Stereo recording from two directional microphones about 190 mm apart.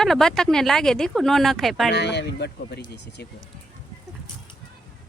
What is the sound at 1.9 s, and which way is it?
Speech, 60° left (ahead or behind).